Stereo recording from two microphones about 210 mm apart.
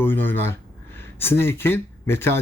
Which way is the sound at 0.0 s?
10° left (ahead or behind).